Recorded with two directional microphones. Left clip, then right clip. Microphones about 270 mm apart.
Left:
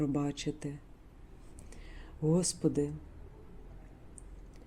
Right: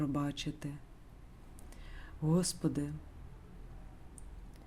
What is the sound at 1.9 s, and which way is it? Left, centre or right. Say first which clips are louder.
Speech: left 4 dB; centre.